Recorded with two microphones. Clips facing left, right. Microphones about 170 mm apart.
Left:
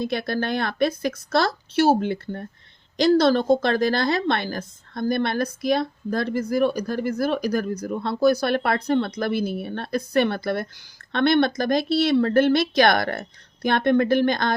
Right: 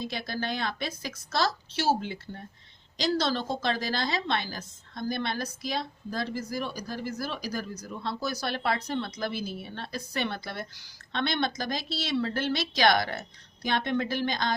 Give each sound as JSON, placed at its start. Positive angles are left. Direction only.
{"t": 0.0, "sound": "a woman's voice", "side_deg": 60}